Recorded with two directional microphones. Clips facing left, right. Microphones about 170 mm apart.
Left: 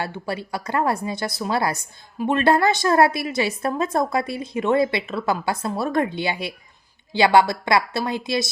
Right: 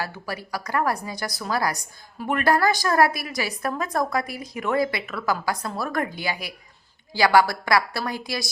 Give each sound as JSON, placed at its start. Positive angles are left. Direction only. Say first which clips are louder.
{"t": 0.0, "sound": "a woman's voice", "louder": "left 4 dB", "side_deg": 25}